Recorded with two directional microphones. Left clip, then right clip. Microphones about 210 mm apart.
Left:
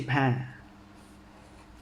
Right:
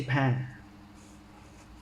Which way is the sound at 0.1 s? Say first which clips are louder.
Left 3 dB; 15° left (ahead or behind).